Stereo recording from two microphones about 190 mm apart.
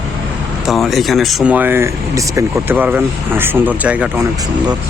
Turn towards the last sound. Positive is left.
turn(degrees=-5)  # may be behind; listen again after turning